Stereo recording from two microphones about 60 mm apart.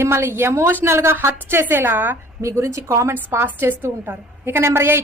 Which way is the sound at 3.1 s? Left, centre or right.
Right.